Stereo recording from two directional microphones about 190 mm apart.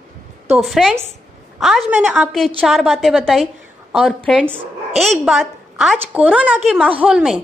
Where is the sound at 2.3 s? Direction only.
Centre (ahead or behind).